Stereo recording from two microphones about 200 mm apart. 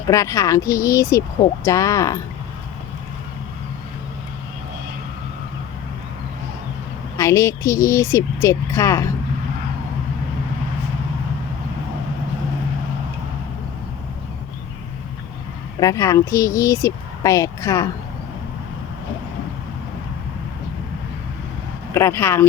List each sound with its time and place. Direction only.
0.1 s speech: 15° left (ahead or behind)
7.2 s speech: 15° left (ahead or behind)
15.8 s speech: 15° left (ahead or behind)
21.9 s speech: 10° left (ahead or behind)